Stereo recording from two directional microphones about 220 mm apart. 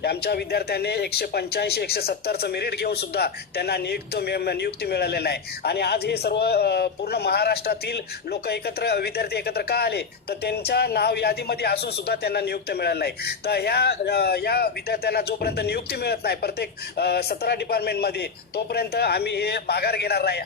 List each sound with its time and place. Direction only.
0.0 s speech: 45° left (ahead or behind)